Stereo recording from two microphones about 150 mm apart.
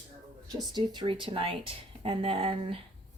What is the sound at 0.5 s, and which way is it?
Speech, 30° right (ahead or behind).